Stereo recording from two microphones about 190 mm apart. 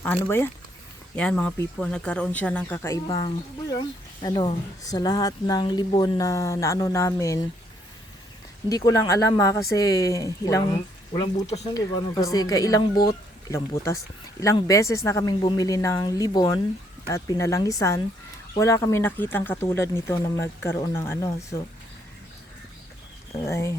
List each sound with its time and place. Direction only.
0.0 s speech: 10° left (ahead or behind)
8.7 s speech: 15° left (ahead or behind)
11.4 s speech: 35° left (ahead or behind)
11.7 s speech: 20° left (ahead or behind)
23.4 s speech: 15° left (ahead or behind)